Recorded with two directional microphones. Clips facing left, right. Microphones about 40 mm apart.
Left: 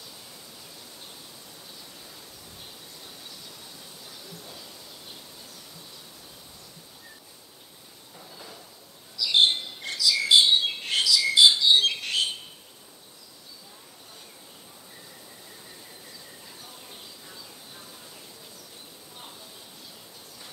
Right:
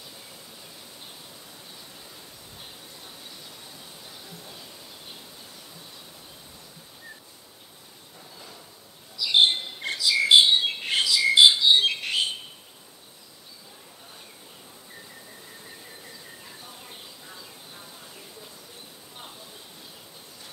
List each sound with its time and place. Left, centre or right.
9.1 s bird: centre
9.8 s bird: right
11.1 s music: centre
11.7 s a sound: centre